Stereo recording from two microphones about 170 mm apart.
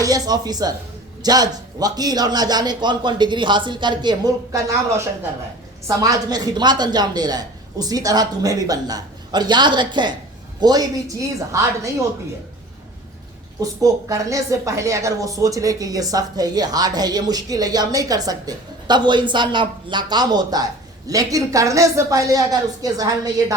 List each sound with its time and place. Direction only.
0.0 s a woman's voice: 20° right (ahead or behind)
13.6 s a woman's voice: 20° right (ahead or behind)